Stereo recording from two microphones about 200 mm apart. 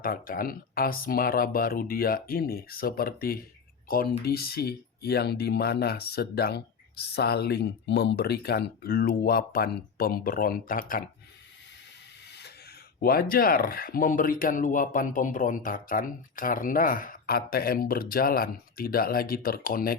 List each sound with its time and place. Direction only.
0.0 s speech: 45° left (ahead or behind)
12.3 s a sound: 55° left (ahead or behind)
13.0 s speech: 45° left (ahead or behind)